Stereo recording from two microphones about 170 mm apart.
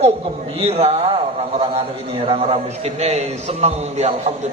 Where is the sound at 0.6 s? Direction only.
35° right (ahead or behind).